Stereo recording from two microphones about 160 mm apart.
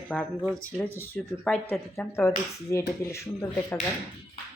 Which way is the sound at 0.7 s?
10° left (ahead or behind).